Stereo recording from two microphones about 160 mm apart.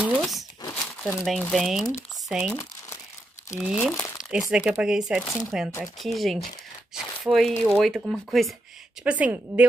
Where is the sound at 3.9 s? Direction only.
20° left (ahead or behind).